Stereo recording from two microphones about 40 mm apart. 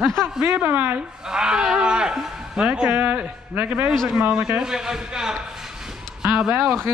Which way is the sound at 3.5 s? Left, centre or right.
Right.